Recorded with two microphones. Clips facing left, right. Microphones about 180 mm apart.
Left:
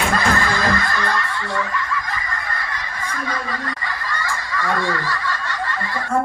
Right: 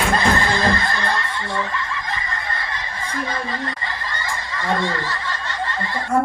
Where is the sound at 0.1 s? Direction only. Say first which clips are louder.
Right 1 dB; 25° right (ahead or behind).